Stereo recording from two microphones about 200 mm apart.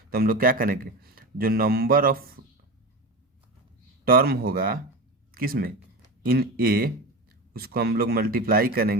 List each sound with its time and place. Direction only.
0.1 s a man's voice: 45° right (ahead or behind)
4.0 s a man's voice: 45° right (ahead or behind)